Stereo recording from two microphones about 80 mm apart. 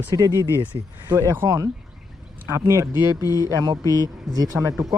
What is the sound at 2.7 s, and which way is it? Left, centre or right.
Speech, right.